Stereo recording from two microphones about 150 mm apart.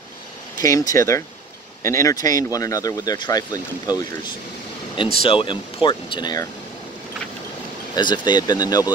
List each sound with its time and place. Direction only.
0.6 s speech: 20° left (ahead or behind)
5.2 s speech: 35° left (ahead or behind)
7.9 s speech: 30° left (ahead or behind)